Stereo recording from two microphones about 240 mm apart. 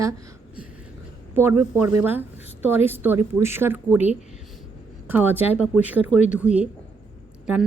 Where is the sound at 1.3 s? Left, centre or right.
Centre.